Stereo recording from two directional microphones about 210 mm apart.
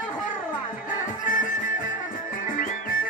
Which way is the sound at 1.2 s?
40° left (ahead or behind).